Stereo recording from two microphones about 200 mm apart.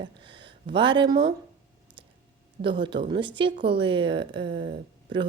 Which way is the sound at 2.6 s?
25° right (ahead or behind).